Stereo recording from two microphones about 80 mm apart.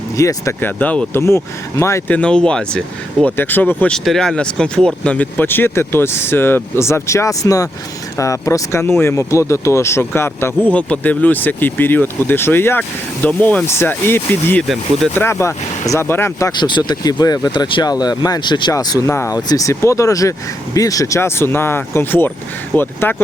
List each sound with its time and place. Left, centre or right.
0.2 s speech: left
0.6 s speech: left
3.2 s speech: left
3.9 s speech: centre; by 10.5 s left
10.7 s speech: centre
13.2 s speech: centre
13.7 s speech: left
16.5 s speech: left
17.8 s speech: left
18.7 s speech: left
19.0 s speech: left
19.3 s speech: left